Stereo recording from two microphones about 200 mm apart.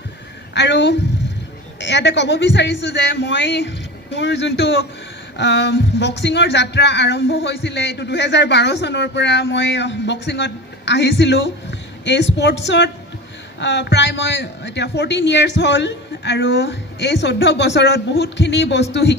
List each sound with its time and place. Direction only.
0.6 s speech: 60° left (ahead or behind)